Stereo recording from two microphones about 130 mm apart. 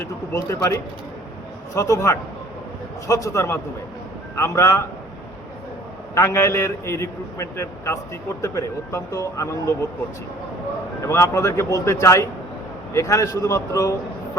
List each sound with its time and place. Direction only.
0.0 s a man's voice: 20° left (ahead or behind)
6.1 s a man's voice: 20° left (ahead or behind)
11.0 s a man's voice: 20° left (ahead or behind)